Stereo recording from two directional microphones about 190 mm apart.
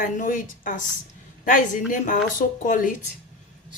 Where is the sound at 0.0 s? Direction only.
45° left (ahead or behind).